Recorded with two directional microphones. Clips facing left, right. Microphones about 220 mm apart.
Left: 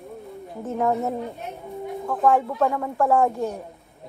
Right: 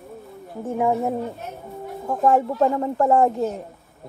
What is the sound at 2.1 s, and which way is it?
Speech, 25° right (ahead or behind).